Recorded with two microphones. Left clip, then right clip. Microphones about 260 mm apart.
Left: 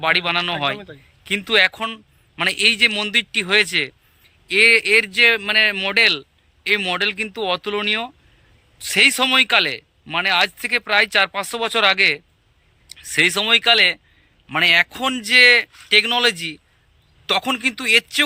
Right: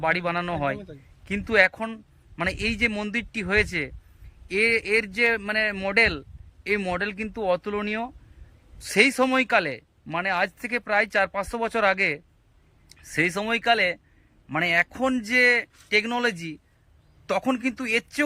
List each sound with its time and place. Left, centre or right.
0.0 s a man's voice: centre
4.4 s speech: centre
4.7 s speech: centre
12.9 s a sound: centre
13.3 s speech: centre